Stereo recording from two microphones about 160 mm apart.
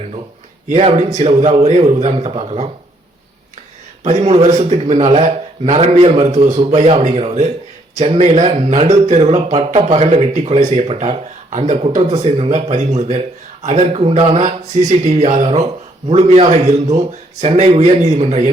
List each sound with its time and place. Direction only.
0.7 s a man's voice: 40° right (ahead or behind)
4.0 s a man's voice: 40° right (ahead or behind)